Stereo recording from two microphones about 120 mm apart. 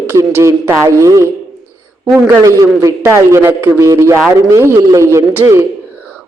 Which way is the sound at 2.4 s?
25° right (ahead or behind).